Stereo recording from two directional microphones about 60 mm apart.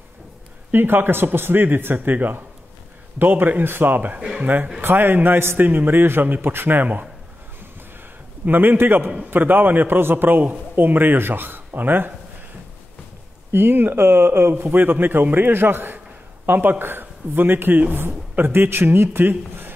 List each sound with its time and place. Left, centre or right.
0.7 s speech: right
4.2 s speech: centre
4.8 s speech: right
8.5 s speech: right
13.5 s speech: right